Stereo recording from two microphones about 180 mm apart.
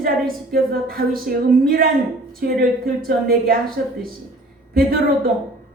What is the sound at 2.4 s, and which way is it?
A woman's voice, 55° right (ahead or behind).